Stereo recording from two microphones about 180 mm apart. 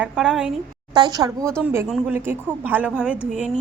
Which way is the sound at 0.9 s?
20° right (ahead or behind).